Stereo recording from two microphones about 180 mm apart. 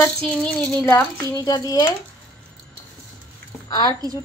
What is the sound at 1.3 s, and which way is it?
Speech, 20° left (ahead or behind).